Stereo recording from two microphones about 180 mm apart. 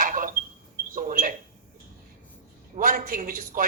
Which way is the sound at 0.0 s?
50° right (ahead or behind).